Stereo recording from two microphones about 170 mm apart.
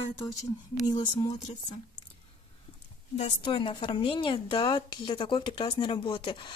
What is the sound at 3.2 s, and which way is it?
A woman's voice, 30° left (ahead or behind).